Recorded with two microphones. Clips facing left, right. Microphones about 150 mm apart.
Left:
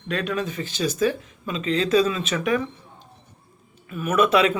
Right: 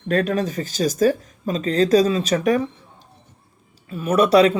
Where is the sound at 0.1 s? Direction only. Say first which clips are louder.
Right 6 dB; 40° right (ahead or behind).